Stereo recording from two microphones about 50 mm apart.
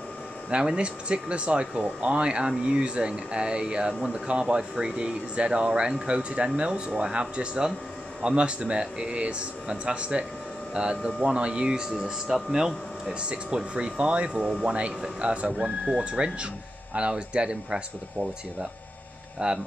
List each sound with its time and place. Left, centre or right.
0.5 s speech: centre
19.4 s speech: right